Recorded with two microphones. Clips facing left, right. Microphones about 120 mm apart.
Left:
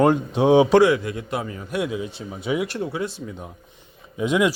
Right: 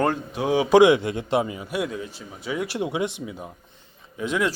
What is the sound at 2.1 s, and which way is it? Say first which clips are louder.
Speech: left 5 dB; 25° left (ahead or behind).